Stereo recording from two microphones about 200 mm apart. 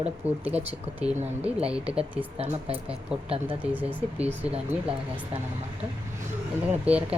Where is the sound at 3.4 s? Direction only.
10° right (ahead or behind).